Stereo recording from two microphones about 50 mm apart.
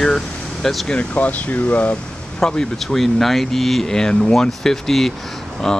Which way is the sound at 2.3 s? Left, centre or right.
Centre.